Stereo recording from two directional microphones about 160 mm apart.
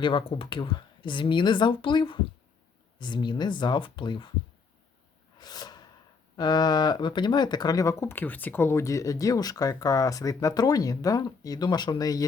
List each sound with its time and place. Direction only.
0.0 s speech: 30° left (ahead or behind)
5.4 s snort: 25° left (ahead or behind)
6.3 s speech: 25° left (ahead or behind)